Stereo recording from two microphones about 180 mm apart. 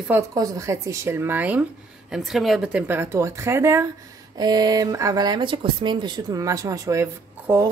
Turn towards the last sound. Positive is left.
turn(degrees=-15)  # may be behind; listen again after turning